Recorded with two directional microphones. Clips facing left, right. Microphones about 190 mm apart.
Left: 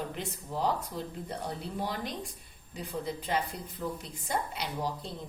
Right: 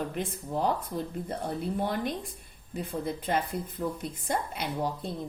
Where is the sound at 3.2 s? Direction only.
55° right (ahead or behind).